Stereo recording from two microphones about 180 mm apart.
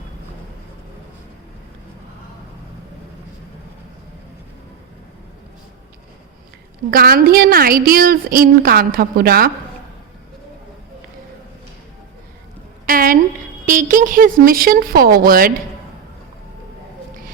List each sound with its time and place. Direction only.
6.9 s a woman's voice: 55° right (ahead or behind)
12.8 s a sound: 55° right (ahead or behind)
13.7 s a woman's voice: 50° right (ahead or behind)